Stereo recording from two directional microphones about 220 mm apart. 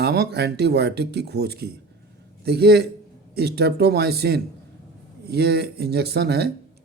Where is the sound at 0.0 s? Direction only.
45° right (ahead or behind).